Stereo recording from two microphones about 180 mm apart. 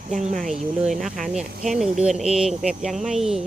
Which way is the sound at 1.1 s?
45° right (ahead or behind).